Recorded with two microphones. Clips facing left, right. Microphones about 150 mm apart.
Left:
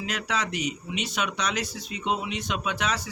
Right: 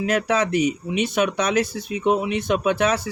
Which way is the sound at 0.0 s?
50° right (ahead or behind).